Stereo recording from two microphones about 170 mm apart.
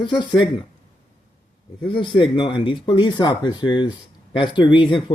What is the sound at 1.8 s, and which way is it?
Speech, 30° left (ahead or behind).